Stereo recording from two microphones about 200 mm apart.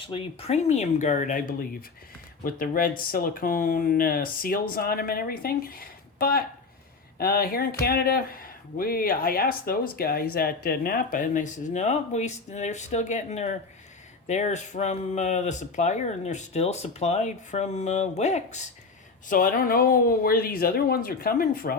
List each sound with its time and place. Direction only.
0.0 s speech: 25° left (ahead or behind)
19.3 s speech: 45° left (ahead or behind)